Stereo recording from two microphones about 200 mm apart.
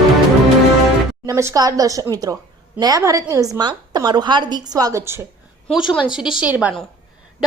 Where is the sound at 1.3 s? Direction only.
15° right (ahead or behind).